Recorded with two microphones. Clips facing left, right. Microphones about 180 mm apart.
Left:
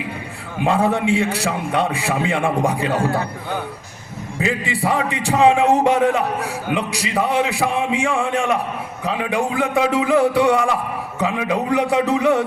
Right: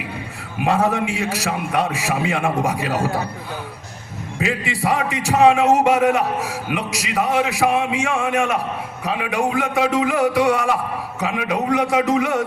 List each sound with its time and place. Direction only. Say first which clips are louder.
0.6 s a man's voice: left 1 dB; 30° left (ahead or behind)
4.4 s a man's voice: left 1 dB; 35° left (ahead or behind)